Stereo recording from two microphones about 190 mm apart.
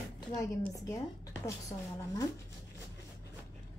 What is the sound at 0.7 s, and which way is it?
Speech, 20° left (ahead or behind).